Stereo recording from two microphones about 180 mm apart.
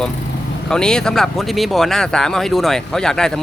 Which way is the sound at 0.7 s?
5° left (ahead or behind).